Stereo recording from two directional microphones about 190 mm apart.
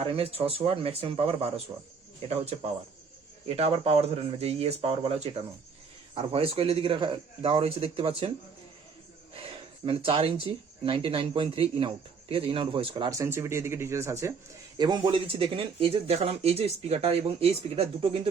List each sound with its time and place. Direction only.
0.0 s speech: 30° right (ahead or behind)
3.4 s speech: 30° right (ahead or behind)
9.3 s speech: 30° right (ahead or behind)